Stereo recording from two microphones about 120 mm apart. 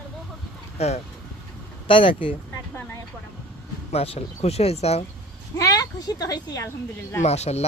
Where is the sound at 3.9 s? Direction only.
55° left (ahead or behind).